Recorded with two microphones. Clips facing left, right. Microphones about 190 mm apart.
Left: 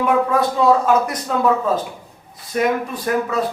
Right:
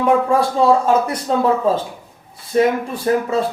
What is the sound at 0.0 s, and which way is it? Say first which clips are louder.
Speech: right 2 dB; 30° right (ahead or behind).